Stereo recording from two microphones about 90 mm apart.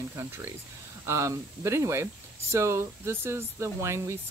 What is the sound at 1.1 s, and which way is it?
Speech, 35° right (ahead or behind).